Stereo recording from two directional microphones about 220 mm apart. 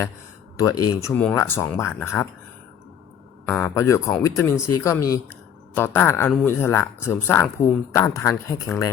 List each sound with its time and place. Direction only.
0.5 s speech: 15° left (ahead or behind)
3.4 s speech: 10° left (ahead or behind)